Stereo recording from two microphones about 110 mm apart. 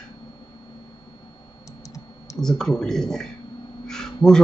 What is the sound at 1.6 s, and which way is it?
Computer keyboard, 30° left (ahead or behind).